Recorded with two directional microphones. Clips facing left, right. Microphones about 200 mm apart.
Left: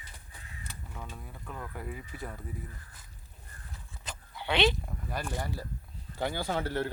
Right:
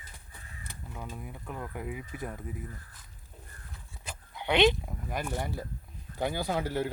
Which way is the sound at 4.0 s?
15° right (ahead or behind).